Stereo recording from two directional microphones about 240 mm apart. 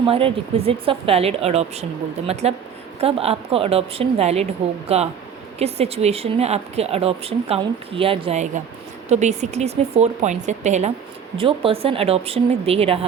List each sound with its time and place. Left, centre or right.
0.0 s speech: right